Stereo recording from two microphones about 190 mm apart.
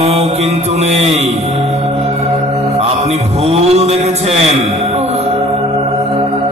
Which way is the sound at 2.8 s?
35° right (ahead or behind).